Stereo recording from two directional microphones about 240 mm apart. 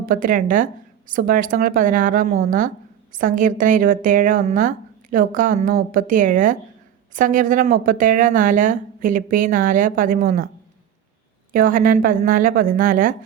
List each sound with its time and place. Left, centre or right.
0.0 s speech: right
11.5 s speech: right